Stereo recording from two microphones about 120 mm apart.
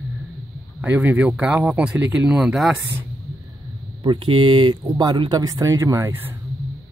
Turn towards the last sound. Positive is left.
turn(degrees=-20)  # may be behind; listen again after turning